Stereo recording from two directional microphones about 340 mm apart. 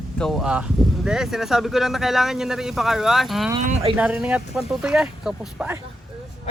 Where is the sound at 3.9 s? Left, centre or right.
Centre.